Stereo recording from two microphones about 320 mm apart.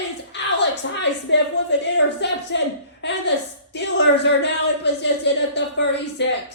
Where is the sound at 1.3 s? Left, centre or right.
Left.